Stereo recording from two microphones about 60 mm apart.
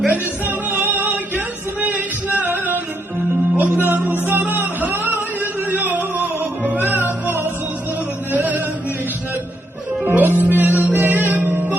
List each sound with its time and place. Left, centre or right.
0.1 s music: right
3.6 s music: right
10.1 s music: right